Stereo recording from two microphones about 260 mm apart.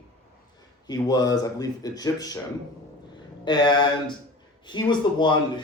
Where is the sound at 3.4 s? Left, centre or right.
Centre.